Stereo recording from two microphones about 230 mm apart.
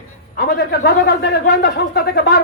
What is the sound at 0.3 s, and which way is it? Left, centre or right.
A man's voice, left.